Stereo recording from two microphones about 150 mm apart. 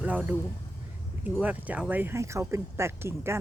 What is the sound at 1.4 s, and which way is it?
Speech, 10° right (ahead or behind).